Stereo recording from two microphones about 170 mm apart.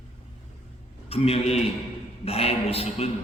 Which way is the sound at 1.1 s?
35° left (ahead or behind).